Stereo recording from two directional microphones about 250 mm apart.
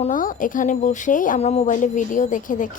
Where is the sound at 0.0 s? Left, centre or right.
Left.